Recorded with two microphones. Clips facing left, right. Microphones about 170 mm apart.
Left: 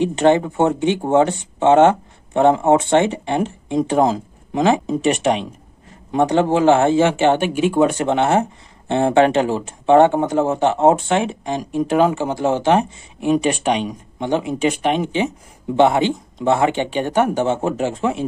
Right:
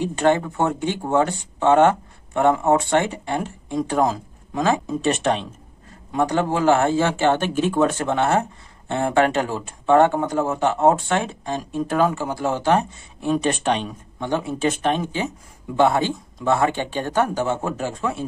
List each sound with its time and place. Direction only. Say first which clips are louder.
0.0 s speech: left 4 dB; 20° left (ahead or behind)